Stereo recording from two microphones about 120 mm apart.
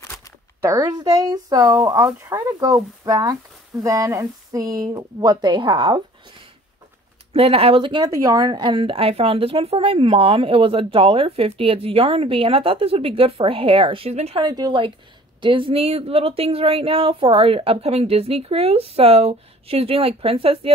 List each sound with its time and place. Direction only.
0.6 s speech: 25° right (ahead or behind); by 6.0 s 45° right (ahead or behind)
7.3 s a woman's voice: 55° right (ahead or behind)
8.0 s a woman's voice: 30° right (ahead or behind); by 14.4 s 55° right (ahead or behind)
14.4 s a woman's voice: 35° right (ahead or behind); by 20.7 s 50° right (ahead or behind)